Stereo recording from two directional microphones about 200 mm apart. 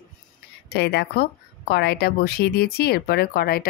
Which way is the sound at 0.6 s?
55° left (ahead or behind).